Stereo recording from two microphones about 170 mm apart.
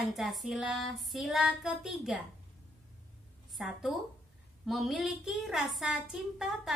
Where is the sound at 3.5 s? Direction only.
Centre (ahead or behind).